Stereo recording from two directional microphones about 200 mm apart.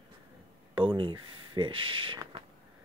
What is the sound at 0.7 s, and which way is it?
Speech, 25° right (ahead or behind).